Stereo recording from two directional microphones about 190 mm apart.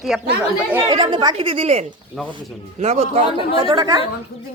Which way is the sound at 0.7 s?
15° right (ahead or behind).